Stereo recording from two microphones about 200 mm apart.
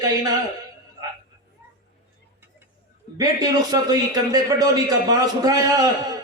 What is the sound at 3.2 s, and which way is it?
A man's voice, 20° right (ahead or behind).